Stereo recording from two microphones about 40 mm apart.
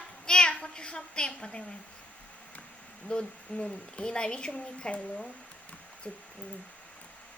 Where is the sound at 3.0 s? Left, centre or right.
Left.